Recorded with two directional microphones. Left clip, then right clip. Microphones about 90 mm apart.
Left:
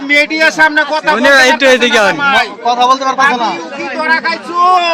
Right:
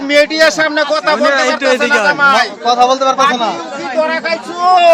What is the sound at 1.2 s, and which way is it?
Speech, 85° left.